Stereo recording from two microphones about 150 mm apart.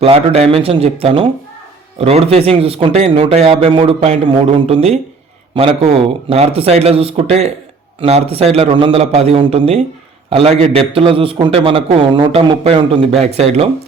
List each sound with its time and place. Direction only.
0.0 s a man's voice: 40° right (ahead or behind)